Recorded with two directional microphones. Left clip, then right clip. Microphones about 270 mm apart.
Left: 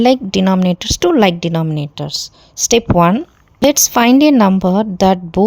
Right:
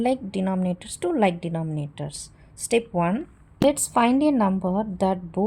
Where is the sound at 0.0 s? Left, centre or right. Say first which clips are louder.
Left 12 dB; left.